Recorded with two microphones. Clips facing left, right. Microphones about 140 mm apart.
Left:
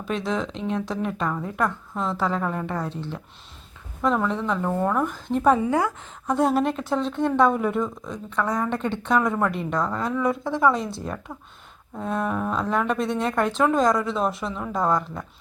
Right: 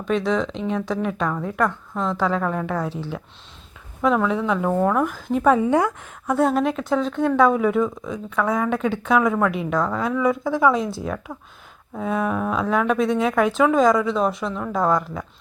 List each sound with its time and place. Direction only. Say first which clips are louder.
0.0 s a woman's voice: right 5 dB; centre (ahead or behind)
5.6 s a woman's voice: right 4 dB; 20° right (ahead or behind)
6.2 s a woman's voice: right 2 dB; centre (ahead or behind)